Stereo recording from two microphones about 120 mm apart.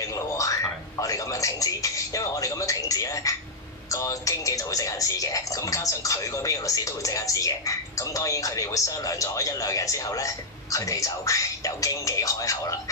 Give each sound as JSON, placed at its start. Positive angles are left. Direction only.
{"t": 0.4, "sound": "music", "side_deg": 25}
{"t": 3.9, "sound": "speech", "side_deg": 25}